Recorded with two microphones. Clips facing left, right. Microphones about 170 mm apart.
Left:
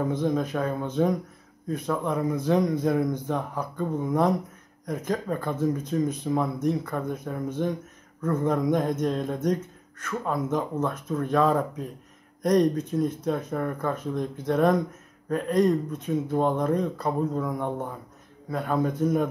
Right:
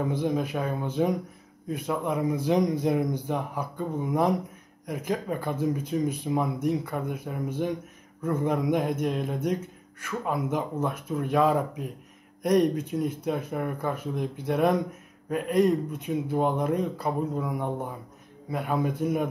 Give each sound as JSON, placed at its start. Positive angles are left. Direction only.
{"t": 0.0, "sound": "speech", "side_deg": -10}